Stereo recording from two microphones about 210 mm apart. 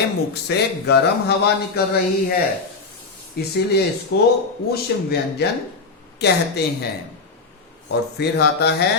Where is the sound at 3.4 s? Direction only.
50° left (ahead or behind).